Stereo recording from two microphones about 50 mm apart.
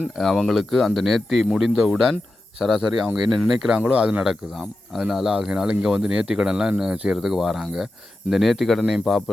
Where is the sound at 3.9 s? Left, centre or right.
Right.